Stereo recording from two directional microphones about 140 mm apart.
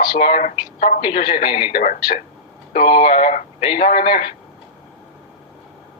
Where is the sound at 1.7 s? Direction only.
65° left (ahead or behind).